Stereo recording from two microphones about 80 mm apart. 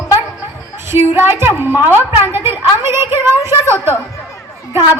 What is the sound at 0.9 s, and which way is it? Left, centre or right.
A woman's voice, right.